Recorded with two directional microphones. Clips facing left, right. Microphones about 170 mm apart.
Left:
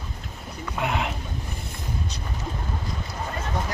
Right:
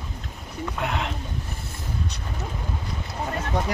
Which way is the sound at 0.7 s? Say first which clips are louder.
Left 2 dB; 5° left (ahead or behind).